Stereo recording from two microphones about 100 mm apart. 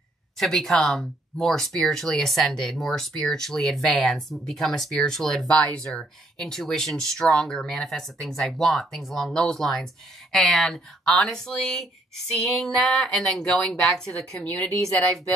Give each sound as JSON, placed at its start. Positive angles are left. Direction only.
{"t": 0.4, "sound": "speech", "side_deg": 5}